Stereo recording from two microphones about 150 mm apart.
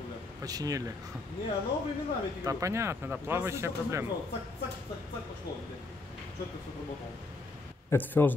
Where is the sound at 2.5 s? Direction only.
20° right (ahead or behind).